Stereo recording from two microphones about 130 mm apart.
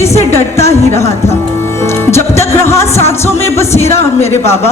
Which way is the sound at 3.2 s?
20° left (ahead or behind).